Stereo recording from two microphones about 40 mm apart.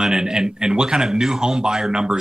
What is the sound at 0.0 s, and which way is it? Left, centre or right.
A man's voice, centre.